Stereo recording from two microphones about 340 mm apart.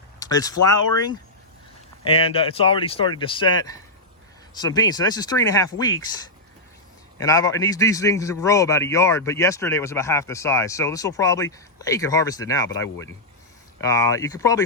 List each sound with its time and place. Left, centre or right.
0.2 s a sound: centre
2.1 s a man's voice: centre
7.2 s a man's voice: centre